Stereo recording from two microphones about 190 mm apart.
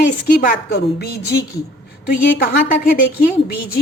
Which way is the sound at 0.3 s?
50° left (ahead or behind).